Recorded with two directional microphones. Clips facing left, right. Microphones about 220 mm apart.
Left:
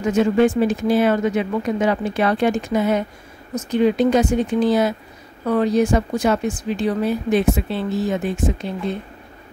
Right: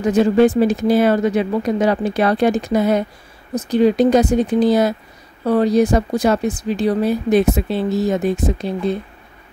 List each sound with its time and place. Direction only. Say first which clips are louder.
0.0 s speech: right 3 dB; 35° right (ahead or behind)